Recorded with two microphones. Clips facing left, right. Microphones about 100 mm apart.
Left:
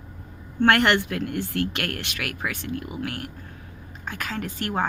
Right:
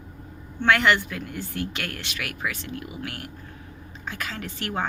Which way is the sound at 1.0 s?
65° left (ahead or behind).